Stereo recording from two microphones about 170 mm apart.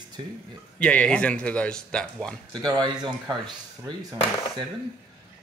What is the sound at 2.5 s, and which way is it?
Speech, 25° right (ahead or behind).